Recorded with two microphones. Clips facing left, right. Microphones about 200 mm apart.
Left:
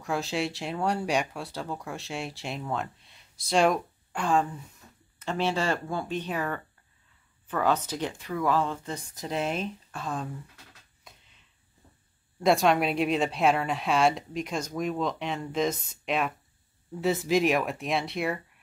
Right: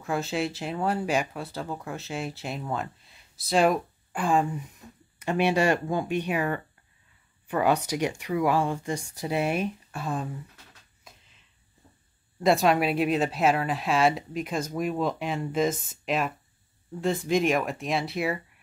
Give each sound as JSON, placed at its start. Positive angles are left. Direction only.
{"t": 0.0, "sound": "speech", "side_deg": 0}
{"t": 11.1, "sound": "a sound", "side_deg": 0}
{"t": 12.4, "sound": "speech", "side_deg": 0}
{"t": 15.7, "sound": "speech", "side_deg": -50}
{"t": 16.1, "sound": "speech", "side_deg": 0}